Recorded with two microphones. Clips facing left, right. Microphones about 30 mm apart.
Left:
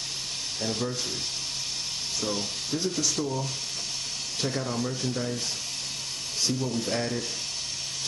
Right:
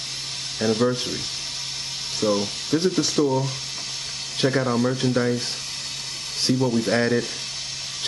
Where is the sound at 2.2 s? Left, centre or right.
Right.